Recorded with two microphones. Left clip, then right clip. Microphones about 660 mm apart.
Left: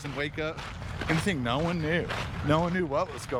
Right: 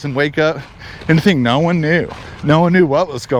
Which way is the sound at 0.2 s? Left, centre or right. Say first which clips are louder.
Right 18 dB; right.